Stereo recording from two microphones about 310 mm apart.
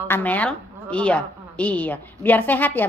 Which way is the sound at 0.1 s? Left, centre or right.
Centre.